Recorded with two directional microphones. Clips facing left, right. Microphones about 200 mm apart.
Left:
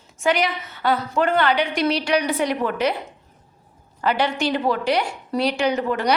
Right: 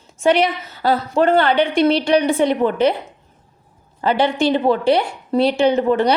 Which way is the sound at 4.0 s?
30° right (ahead or behind).